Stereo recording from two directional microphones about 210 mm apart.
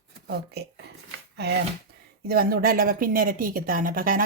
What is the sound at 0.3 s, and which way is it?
Speech, 50° right (ahead or behind).